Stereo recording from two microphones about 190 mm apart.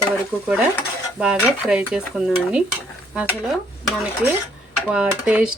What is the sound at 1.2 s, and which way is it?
A woman's voice, 5° right (ahead or behind).